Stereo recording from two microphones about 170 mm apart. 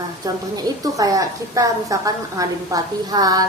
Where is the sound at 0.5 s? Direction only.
20° right (ahead or behind).